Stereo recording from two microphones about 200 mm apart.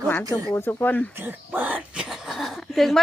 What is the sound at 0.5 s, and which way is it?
Speech, 10° left (ahead or behind).